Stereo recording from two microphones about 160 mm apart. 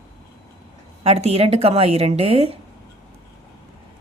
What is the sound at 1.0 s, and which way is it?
Speech, 40° right (ahead or behind).